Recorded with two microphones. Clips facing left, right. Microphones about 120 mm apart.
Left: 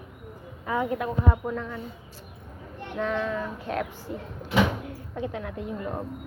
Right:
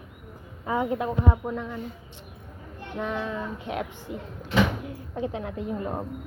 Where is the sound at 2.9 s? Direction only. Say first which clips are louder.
Left 2 dB; 15° right (ahead or behind); by 5.9 s 30° right (ahead or behind).